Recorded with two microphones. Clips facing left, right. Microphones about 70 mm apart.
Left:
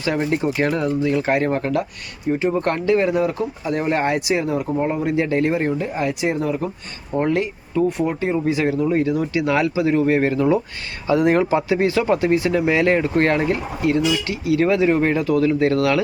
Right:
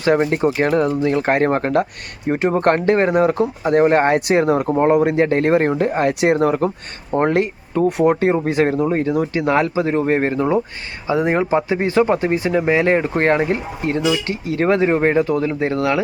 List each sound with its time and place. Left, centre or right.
0.5 s speech: right